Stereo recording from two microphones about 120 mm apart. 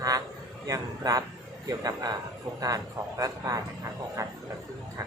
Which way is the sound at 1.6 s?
30° right (ahead or behind).